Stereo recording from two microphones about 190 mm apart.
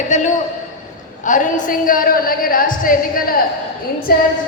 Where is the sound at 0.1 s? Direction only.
40° left (ahead or behind).